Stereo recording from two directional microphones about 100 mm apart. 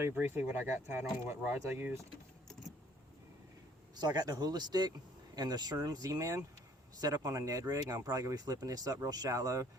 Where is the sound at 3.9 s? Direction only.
45° right (ahead or behind).